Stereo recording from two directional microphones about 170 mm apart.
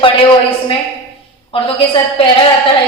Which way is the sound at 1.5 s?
30° left (ahead or behind).